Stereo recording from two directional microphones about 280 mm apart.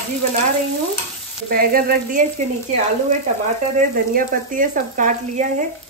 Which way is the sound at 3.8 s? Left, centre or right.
Right.